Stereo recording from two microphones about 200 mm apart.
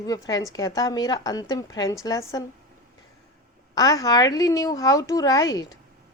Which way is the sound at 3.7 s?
20° left (ahead or behind).